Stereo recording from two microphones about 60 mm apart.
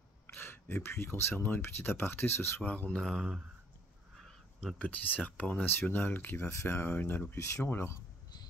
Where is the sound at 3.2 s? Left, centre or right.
Centre.